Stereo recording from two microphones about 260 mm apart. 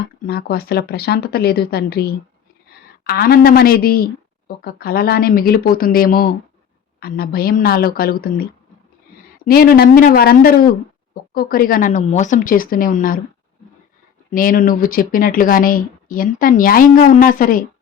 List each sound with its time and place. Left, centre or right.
0.0 s speech: left
14.3 s speech: left